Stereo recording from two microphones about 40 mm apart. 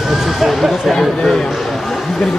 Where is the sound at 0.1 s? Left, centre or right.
Centre.